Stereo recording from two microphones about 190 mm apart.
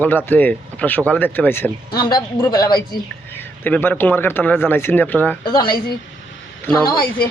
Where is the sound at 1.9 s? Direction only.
25° left (ahead or behind).